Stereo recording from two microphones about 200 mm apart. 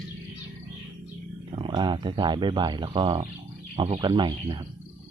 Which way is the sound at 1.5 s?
25° right (ahead or behind).